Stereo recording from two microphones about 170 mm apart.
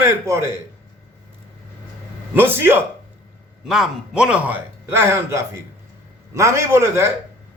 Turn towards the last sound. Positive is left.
turn(degrees=-15)  # may be behind; listen again after turning